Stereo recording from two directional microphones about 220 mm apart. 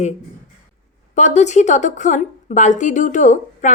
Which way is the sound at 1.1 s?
30° left (ahead or behind).